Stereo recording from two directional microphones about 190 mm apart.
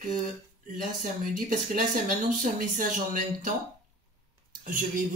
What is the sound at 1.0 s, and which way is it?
Speech, 45° right (ahead or behind).